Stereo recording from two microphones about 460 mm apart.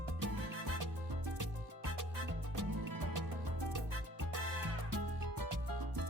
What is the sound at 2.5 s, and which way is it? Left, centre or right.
Music, right.